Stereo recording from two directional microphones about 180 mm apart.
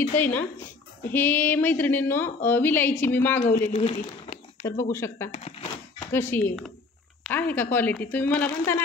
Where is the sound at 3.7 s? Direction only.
35° left (ahead or behind).